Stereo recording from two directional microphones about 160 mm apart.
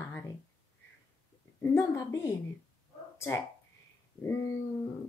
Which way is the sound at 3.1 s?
15° left (ahead or behind).